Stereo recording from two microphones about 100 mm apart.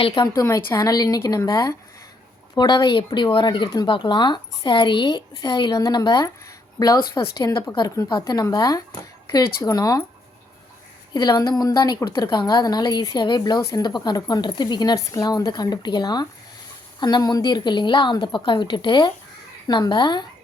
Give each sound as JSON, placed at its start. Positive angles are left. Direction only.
{"t": 0.1, "sound": "a woman's voice", "side_deg": 40}
{"t": 2.6, "sound": "a woman's voice", "side_deg": 50}
{"t": 5.7, "sound": "a woman's voice", "side_deg": 40}
{"t": 7.5, "sound": "a woman's voice", "side_deg": 55}
{"t": 11.1, "sound": "a woman's voice", "side_deg": 45}